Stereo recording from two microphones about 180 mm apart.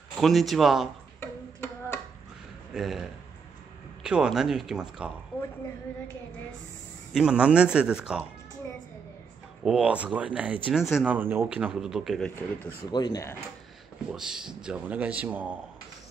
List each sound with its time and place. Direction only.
0.2 s speech: centre (ahead or behind)
1.2 s tick-tock: 15° left (ahead or behind)
2.7 s speech: 5° right (ahead or behind)
7.1 s speech: 5° right (ahead or behind)
9.7 s speech: 5° right (ahead or behind)
12.9 s speech: 20° left (ahead or behind)
14.1 s speech: 5° right (ahead or behind)